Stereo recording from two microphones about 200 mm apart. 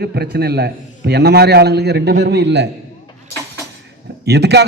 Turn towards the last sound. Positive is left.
turn(degrees=-55)  # may be behind; listen again after turning